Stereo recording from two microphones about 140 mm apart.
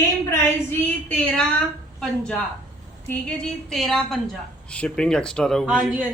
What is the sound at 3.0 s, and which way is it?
A woman's voice, 5° left (ahead or behind).